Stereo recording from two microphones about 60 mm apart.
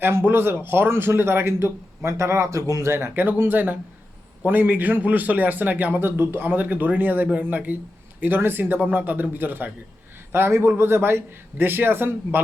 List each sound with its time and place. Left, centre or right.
0.0 s speech: right
2.8 s speech: right
3.2 s speech: right